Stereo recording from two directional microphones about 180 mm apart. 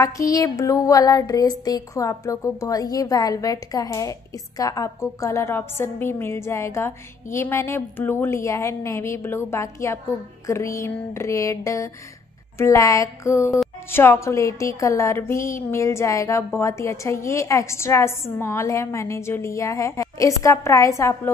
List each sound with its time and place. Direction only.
0.0 s a woman's voice: 20° left (ahead or behind)